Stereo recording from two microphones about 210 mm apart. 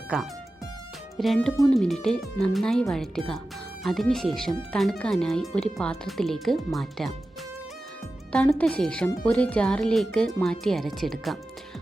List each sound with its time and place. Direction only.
1.1 s speech: centre (ahead or behind)
8.3 s speech: 5° left (ahead or behind)